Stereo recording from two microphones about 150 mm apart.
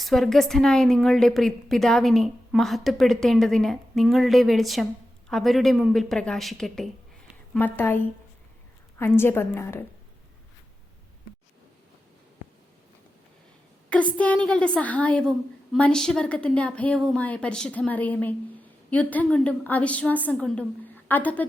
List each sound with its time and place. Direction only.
0.0 s a woman's voice: centre (ahead or behind)
7.5 s a woman's voice: 15° left (ahead or behind)
13.9 s a woman's voice: 10° left (ahead or behind)